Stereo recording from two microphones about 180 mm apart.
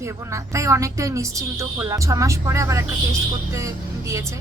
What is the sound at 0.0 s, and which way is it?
Speech, 15° right (ahead or behind).